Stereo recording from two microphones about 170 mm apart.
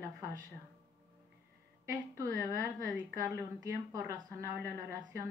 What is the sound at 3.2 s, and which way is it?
A woman's voice, 20° right (ahead or behind).